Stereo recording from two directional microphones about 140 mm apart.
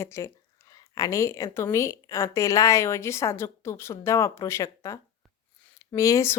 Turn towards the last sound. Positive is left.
turn(degrees=20)  # may be behind; listen again after turning